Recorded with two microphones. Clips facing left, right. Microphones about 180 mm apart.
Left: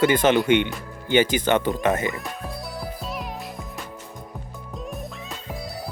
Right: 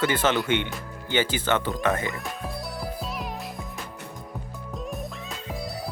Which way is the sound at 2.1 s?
Centre (ahead or behind).